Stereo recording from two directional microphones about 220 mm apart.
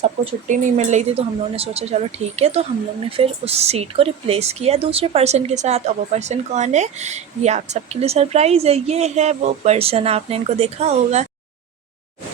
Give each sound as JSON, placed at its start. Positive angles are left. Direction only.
{"t": 0.0, "sound": "speech", "side_deg": -30}